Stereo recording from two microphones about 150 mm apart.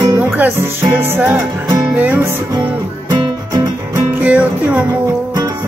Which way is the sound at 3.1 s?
25° right (ahead or behind).